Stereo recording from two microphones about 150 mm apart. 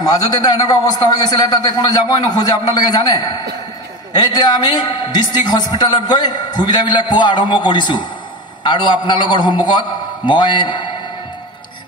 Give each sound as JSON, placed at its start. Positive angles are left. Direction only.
{"t": 0.1, "sound": "a man's voice", "side_deg": 25}